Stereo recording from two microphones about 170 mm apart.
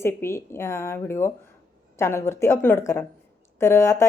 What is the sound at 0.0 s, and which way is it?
A woman's voice, 15° left (ahead or behind).